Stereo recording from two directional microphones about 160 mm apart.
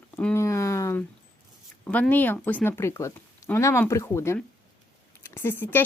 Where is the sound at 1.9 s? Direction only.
10° left (ahead or behind).